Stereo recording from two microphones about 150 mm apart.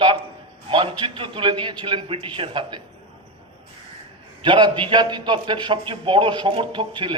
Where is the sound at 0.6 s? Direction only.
35° right (ahead or behind).